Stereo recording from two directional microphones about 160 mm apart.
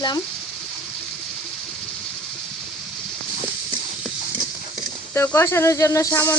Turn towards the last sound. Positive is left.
turn(degrees=15)  # may be behind; listen again after turning